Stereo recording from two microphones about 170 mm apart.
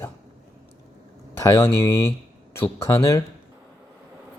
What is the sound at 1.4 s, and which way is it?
Speech, 15° left (ahead or behind).